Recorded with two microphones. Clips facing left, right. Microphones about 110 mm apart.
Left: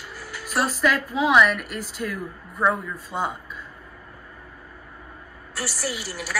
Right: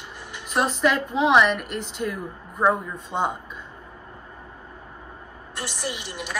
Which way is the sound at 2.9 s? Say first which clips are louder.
Right 2 dB; 5° left (ahead or behind).